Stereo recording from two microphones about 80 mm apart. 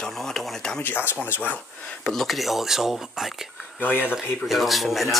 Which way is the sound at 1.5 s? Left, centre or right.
Centre.